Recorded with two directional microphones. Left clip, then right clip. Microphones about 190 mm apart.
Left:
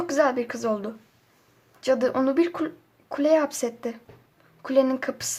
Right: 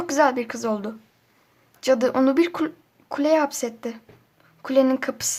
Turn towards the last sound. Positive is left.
turn(degrees=-15)  # may be behind; listen again after turning